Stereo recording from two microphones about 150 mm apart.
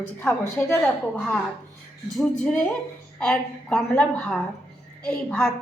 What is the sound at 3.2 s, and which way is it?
A woman's voice, 5° left (ahead or behind).